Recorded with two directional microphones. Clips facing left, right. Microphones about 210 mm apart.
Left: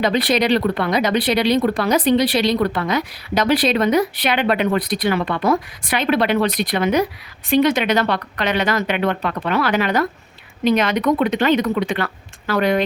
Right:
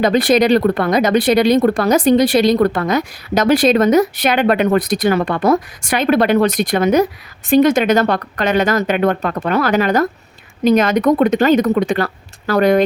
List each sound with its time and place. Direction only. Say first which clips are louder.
0.0 s speech: right 5 dB; 45° right (ahead or behind)